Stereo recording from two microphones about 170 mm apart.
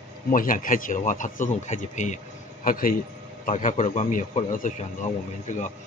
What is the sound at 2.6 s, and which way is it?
Speech, 55° left (ahead or behind).